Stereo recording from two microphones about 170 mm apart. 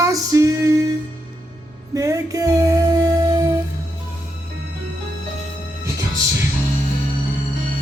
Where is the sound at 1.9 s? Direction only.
20° right (ahead or behind).